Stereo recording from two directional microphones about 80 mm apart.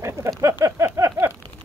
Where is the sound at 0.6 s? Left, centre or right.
Right.